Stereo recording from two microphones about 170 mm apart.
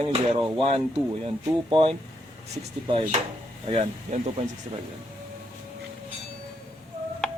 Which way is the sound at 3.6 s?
35° right (ahead or behind).